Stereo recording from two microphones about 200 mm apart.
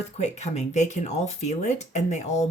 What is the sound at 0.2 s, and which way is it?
Speech, 35° left (ahead or behind).